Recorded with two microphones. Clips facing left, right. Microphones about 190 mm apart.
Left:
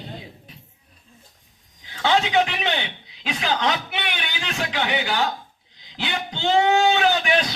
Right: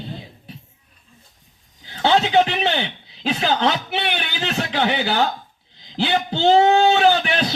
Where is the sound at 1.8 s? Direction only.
30° right (ahead or behind).